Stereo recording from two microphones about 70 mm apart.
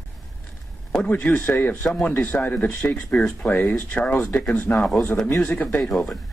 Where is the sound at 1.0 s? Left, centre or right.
Centre.